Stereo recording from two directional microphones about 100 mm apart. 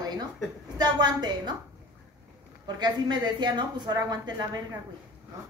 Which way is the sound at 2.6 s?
45° right (ahead or behind).